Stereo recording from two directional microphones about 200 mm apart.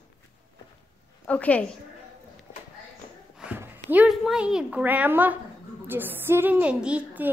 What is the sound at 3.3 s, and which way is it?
A woman's voice, 5° right (ahead or behind).